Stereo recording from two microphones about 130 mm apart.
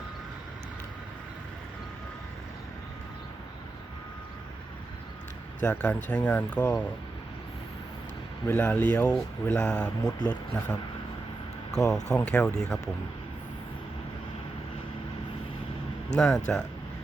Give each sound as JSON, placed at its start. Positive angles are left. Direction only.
{"t": 5.6, "sound": "speech", "side_deg": 10}
{"t": 8.4, "sound": "speech", "side_deg": 10}
{"t": 10.1, "sound": "speech", "side_deg": 30}
{"t": 11.8, "sound": "speech", "side_deg": 25}
{"t": 12.1, "sound": "speech", "side_deg": 10}
{"t": 16.1, "sound": "speech", "side_deg": 5}